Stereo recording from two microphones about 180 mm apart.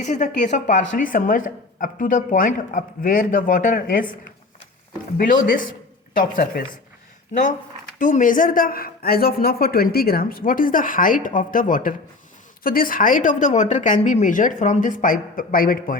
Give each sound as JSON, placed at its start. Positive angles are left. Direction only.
{"t": 0.0, "sound": "speech", "side_deg": 40}
{"t": 5.1, "sound": "speech", "side_deg": 55}
{"t": 7.9, "sound": "speech", "side_deg": 45}